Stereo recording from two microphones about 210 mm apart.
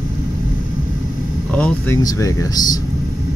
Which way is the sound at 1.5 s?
10° left (ahead or behind).